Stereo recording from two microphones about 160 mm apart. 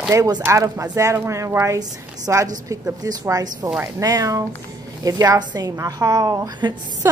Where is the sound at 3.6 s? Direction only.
10° right (ahead or behind).